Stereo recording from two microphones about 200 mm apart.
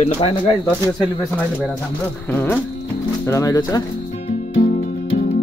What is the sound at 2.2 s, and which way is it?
Speech, 10° left (ahead or behind).